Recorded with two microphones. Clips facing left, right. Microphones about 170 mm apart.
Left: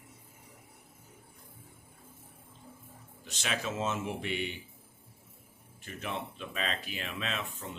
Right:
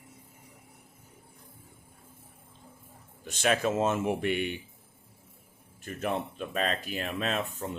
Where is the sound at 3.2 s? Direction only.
50° right (ahead or behind).